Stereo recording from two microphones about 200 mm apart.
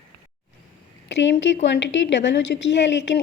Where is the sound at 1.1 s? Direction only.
65° left (ahead or behind).